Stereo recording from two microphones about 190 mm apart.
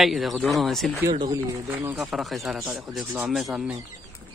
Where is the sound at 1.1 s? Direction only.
20° right (ahead or behind); by 3.6 s centre (ahead or behind).